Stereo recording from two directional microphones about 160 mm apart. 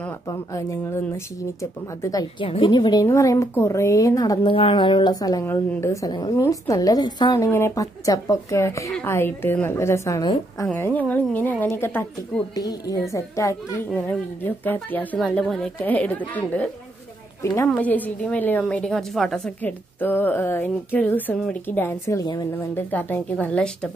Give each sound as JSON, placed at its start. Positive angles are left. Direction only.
{"t": 0.3, "sound": "a woman's voice", "side_deg": 20}
{"t": 2.4, "sound": "a woman's voice", "side_deg": 30}
{"t": 17.4, "sound": "a woman's voice", "side_deg": 20}
{"t": 22.8, "sound": "a woman's voice", "side_deg": 10}